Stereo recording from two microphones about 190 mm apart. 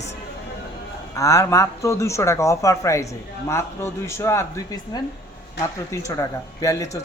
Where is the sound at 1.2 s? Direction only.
15° left (ahead or behind).